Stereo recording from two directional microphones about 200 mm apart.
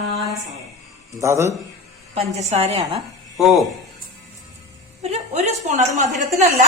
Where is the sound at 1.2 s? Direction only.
15° right (ahead or behind).